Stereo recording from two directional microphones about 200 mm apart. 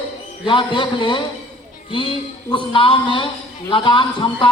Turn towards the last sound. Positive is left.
turn(degrees=25)  # may be behind; listen again after turning